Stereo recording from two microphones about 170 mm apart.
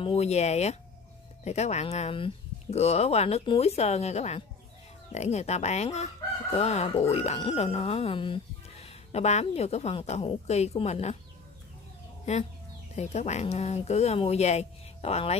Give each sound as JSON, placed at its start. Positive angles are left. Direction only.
{"t": 0.0, "sound": "speech", "side_deg": 35}
{"t": 12.9, "sound": "speech", "side_deg": 40}